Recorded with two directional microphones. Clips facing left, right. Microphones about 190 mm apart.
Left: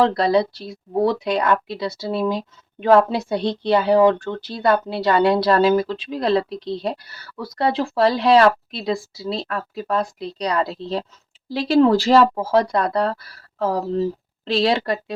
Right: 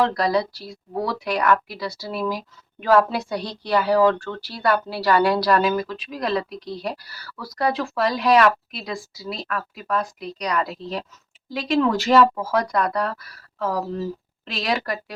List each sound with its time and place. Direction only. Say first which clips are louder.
0.0 s speech: left 4 dB; 25° left (ahead or behind)